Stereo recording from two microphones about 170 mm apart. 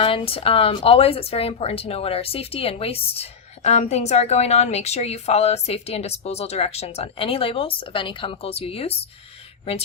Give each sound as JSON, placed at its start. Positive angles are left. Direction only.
{"t": 0.0, "sound": "speech", "side_deg": 35}